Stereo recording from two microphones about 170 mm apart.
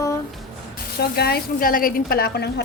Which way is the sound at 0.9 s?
70° left (ahead or behind).